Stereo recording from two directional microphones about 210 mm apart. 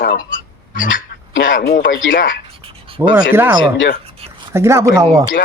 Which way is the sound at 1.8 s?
65° left (ahead or behind).